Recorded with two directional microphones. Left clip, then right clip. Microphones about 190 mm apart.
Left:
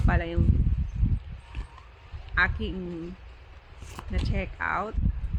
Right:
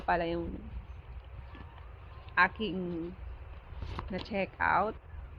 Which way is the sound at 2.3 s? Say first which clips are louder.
Left 2 dB; 25° left (ahead or behind).